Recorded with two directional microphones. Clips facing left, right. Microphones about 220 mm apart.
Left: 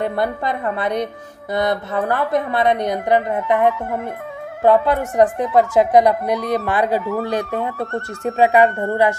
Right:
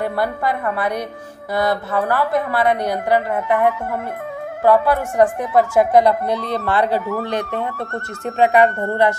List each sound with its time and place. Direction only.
0.0 s a woman's voice: 20° left (ahead or behind)